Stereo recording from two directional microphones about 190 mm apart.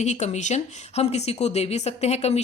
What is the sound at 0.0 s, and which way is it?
Speech, 35° left (ahead or behind).